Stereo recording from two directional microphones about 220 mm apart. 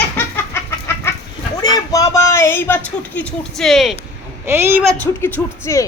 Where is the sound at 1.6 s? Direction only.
15° left (ahead or behind); by 3.9 s centre (ahead or behind).